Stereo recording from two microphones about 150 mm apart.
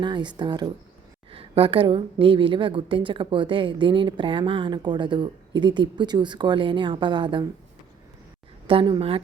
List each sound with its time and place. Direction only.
0.0 s a woman's voice: 30° right (ahead or behind)
8.6 s a woman's voice: 35° right (ahead or behind)